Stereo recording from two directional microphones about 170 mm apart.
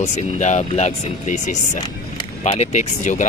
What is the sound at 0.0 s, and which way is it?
Speech, 45° left (ahead or behind).